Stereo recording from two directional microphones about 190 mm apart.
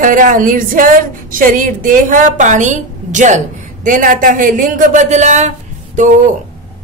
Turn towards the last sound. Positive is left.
turn(degrees=-40)  # may be behind; listen again after turning